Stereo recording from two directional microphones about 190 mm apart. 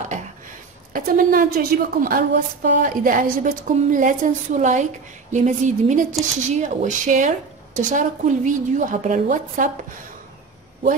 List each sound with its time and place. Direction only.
0.9 s a woman's voice: 45° right (ahead or behind)